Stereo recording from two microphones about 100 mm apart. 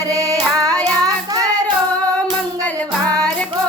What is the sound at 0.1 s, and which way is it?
Child singing, 35° right (ahead or behind).